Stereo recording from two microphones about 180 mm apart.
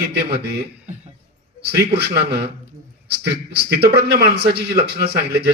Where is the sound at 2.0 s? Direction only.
65° right (ahead or behind).